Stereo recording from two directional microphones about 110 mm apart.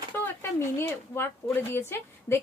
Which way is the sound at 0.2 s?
20° left (ahead or behind).